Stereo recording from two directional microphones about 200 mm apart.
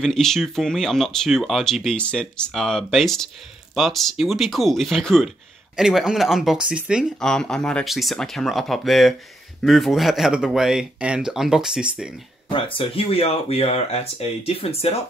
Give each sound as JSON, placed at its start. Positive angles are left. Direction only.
{"t": 0.0, "sound": "speech", "side_deg": 0}
{"t": 12.4, "sound": "speech", "side_deg": 25}